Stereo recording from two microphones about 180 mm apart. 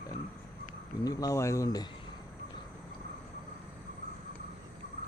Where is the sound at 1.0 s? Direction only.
20° left (ahead or behind).